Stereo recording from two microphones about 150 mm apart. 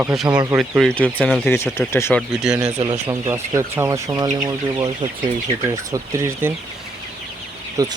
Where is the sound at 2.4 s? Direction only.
5° right (ahead or behind).